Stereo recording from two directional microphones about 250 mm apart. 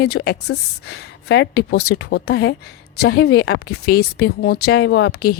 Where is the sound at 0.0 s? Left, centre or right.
Left.